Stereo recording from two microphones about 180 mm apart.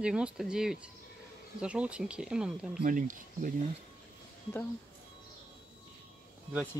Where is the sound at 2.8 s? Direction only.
50° right (ahead or behind).